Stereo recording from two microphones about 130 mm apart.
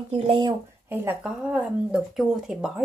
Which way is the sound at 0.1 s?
40° right (ahead or behind).